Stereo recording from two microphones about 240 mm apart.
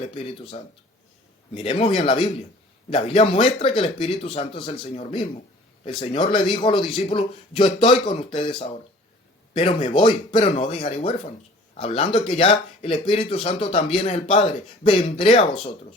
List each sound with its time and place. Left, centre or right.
0.0 s speech: left
1.5 s speech: left